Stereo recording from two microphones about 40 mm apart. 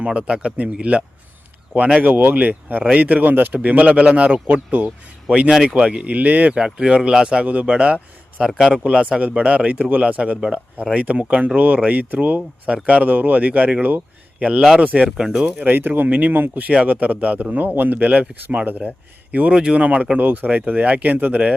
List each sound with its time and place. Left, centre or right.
0.0 s speech: right
2.0 s speech: right
5.6 s speech: right
6.5 s speech: right
7.4 s speech: right
7.7 s speech: right
8.4 s speech: centre
8.8 s speech: right
15.5 s speech: right
16.6 s speech: right
17.7 s a man's voice: right
20.1 s speech: right